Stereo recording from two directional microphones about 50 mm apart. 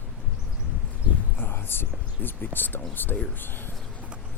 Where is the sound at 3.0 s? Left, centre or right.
Left.